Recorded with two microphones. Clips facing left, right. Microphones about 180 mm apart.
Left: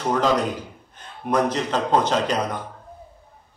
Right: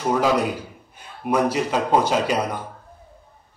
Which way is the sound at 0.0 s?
10° right (ahead or behind).